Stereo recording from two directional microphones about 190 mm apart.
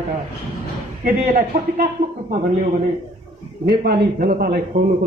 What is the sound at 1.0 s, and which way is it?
A man's voice, 45° right (ahead or behind).